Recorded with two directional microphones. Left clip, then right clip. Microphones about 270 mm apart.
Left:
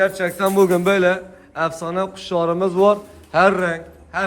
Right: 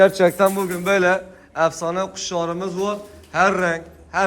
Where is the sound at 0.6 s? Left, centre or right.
Centre.